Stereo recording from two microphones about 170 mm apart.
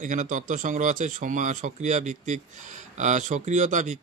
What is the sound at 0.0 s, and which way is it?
Speech, 50° right (ahead or behind).